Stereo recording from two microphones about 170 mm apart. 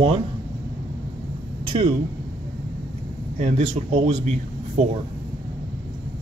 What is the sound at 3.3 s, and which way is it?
Speech, 40° right (ahead or behind).